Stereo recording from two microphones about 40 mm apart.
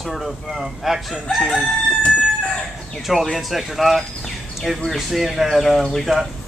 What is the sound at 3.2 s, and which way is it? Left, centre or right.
Chicken, centre.